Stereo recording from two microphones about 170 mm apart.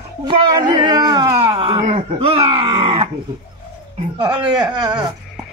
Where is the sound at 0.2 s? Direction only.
25° right (ahead or behind).